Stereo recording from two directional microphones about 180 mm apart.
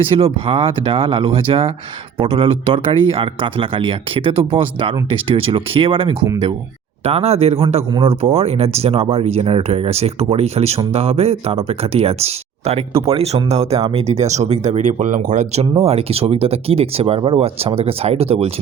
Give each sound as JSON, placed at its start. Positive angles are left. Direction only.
{"t": 0.1, "sound": "speech", "side_deg": -30}